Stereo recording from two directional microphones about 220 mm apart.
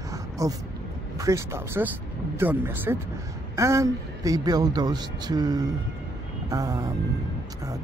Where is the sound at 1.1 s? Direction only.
15° right (ahead or behind).